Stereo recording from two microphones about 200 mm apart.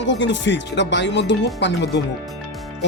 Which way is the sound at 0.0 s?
65° left (ahead or behind).